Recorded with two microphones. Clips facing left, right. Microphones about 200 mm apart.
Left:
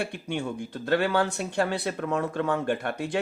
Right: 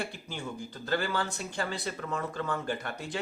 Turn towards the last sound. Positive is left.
turn(degrees=60)  # may be behind; listen again after turning